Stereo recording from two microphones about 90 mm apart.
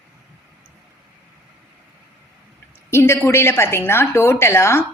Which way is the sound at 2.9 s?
30° left (ahead or behind).